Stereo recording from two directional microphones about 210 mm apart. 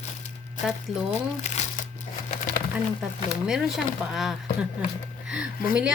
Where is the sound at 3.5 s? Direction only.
Centre (ahead or behind).